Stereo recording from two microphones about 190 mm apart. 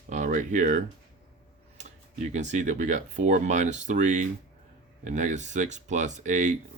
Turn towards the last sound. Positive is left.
turn(degrees=-40)  # may be behind; listen again after turning